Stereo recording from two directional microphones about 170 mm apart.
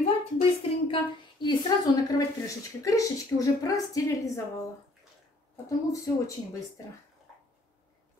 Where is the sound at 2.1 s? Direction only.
20° left (ahead or behind).